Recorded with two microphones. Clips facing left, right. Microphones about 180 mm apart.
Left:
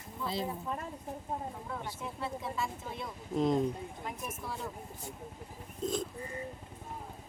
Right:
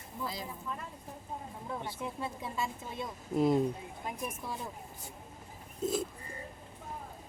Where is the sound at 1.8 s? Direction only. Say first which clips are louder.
Right 1 dB; 15° right (ahead or behind).